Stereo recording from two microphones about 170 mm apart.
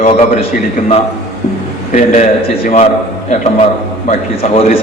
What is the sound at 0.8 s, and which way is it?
Speech, 55° left (ahead or behind).